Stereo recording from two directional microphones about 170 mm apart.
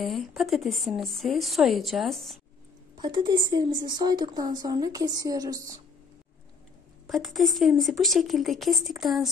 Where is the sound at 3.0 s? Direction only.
30° right (ahead or behind).